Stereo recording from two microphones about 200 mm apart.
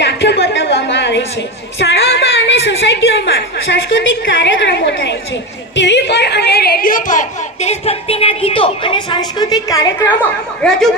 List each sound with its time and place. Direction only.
0.0 s a sound: 60° left (ahead or behind)
1.8 s a woman's voice: 55° left (ahead or behind); by 10.2 s 15° left (ahead or behind)
10.6 s speech: 5° left (ahead or behind)